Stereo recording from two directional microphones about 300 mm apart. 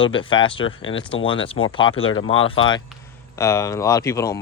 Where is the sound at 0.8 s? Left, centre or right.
Left.